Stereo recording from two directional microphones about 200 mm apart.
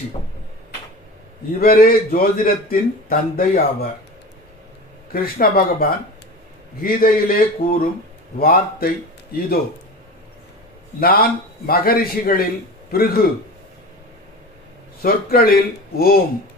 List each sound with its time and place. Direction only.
1.6 s a man's voice: 50° left (ahead or behind)
5.1 s a man's voice: 50° left (ahead or behind)
11.0 s a man's voice: 50° left (ahead or behind)
15.0 s a man's voice: 50° left (ahead or behind)